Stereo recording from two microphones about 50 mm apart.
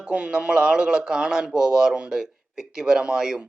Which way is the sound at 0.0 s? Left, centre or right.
Right.